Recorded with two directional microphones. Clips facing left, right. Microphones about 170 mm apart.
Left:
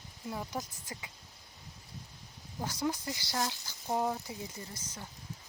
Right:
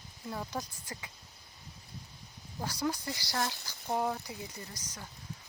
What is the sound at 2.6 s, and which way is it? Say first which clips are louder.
Speech: even; 20° left (ahead or behind).